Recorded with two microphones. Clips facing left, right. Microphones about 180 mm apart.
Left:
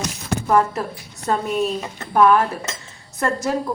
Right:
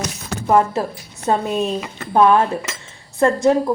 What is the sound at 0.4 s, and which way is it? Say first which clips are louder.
Speech: right 3 dB; 25° right (ahead or behind).